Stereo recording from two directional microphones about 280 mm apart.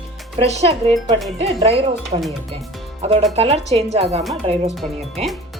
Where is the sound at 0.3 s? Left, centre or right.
Right.